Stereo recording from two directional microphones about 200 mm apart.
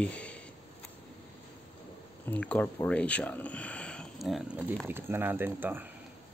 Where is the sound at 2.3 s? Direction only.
5° left (ahead or behind); by 5.9 s 10° right (ahead or behind).